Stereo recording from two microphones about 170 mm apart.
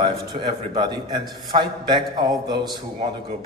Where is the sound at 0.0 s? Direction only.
30° right (ahead or behind).